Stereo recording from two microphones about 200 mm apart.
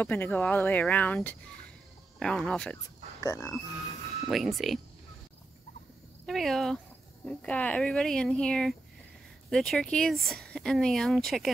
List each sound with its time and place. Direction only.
0.0 s speech: 10° left (ahead or behind)
3.2 s speech: 15° left (ahead or behind)
4.3 s speech: centre (ahead or behind)
6.2 s speech: centre (ahead or behind)